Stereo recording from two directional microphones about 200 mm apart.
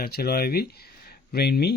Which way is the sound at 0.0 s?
50° left (ahead or behind).